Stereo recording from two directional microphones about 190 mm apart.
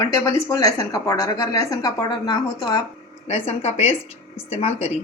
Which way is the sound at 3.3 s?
35° left (ahead or behind).